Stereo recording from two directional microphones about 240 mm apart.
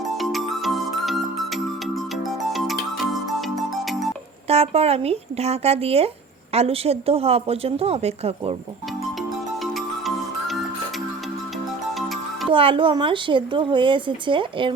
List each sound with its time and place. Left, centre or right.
0.2 s music: centre
2.5 s music: centre
4.4 s speech: right
12.5 s speech: right